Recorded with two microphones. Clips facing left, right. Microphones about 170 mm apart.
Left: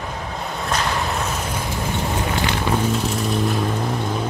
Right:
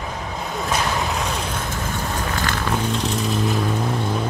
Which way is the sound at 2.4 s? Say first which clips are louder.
Left 2 dB; 15° left (ahead or behind).